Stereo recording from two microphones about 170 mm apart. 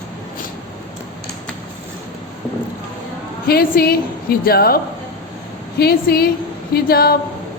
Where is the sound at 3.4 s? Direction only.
65° left (ahead or behind).